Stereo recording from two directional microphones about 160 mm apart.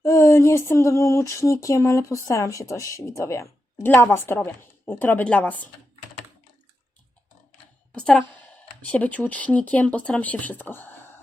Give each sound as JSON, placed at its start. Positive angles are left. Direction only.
{"t": 0.0, "sound": "speech", "side_deg": 20}
{"t": 7.9, "sound": "a woman's voice", "side_deg": 5}